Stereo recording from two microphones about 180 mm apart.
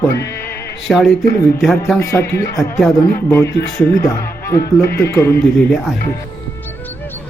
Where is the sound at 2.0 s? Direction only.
15° left (ahead or behind).